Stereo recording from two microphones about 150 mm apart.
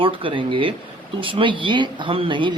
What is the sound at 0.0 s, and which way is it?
Speech, 35° right (ahead or behind).